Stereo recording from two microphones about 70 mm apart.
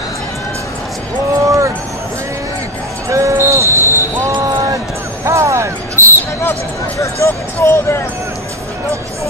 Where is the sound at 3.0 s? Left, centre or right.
Right.